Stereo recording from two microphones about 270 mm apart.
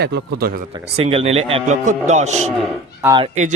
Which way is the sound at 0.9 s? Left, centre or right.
Right.